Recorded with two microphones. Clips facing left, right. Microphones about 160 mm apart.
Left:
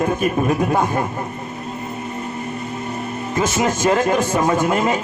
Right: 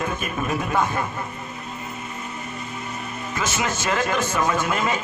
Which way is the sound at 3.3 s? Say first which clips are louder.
Left 7 dB; 35° left (ahead or behind).